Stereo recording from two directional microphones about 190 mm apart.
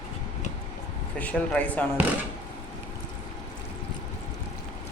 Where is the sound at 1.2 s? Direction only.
5° left (ahead or behind).